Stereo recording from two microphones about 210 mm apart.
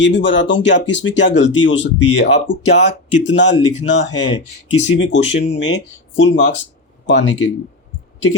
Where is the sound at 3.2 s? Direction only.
60° left (ahead or behind).